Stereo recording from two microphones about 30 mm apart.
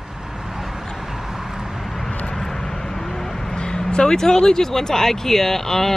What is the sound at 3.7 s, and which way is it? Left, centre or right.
Vehicle, left.